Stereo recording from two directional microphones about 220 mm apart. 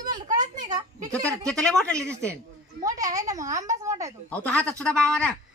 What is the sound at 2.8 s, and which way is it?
A child's voice, 15° right (ahead or behind).